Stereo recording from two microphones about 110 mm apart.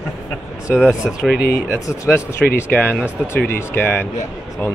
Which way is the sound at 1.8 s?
30° left (ahead or behind).